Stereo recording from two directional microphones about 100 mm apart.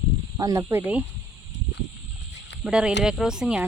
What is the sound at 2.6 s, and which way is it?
Speech, 10° right (ahead or behind).